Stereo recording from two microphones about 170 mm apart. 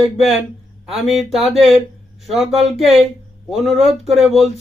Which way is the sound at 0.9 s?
Centre (ahead or behind).